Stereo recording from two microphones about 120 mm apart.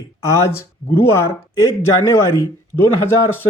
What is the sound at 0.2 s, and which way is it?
Speech, 25° left (ahead or behind).